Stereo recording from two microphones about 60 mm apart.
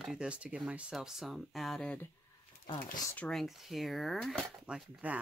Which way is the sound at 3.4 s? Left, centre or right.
Centre.